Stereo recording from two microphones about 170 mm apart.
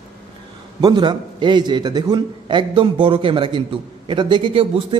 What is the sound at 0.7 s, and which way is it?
A man's voice, 25° right (ahead or behind).